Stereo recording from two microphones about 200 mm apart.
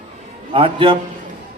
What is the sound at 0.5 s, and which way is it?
Speech, 25° right (ahead or behind).